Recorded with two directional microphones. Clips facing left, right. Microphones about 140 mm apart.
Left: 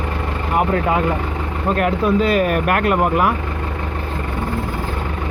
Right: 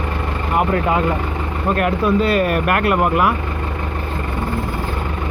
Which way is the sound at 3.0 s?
35° left (ahead or behind).